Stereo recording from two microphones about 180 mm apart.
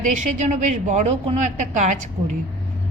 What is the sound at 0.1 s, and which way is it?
A woman's voice, 40° right (ahead or behind).